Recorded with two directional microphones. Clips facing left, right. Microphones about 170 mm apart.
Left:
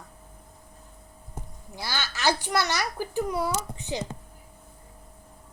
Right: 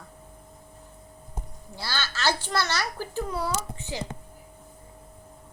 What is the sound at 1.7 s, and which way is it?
A child's voice, 15° left (ahead or behind).